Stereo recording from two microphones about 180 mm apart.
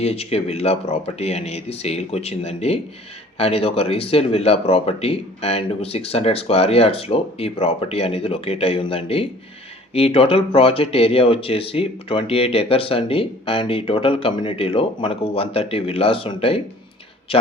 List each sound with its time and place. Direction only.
0.0 s speech: 35° left (ahead or behind)